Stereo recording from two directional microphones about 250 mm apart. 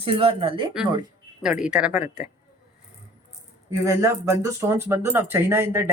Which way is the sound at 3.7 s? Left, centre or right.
Centre.